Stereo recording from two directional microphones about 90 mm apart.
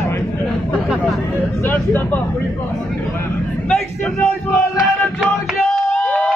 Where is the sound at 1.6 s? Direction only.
20° left (ahead or behind).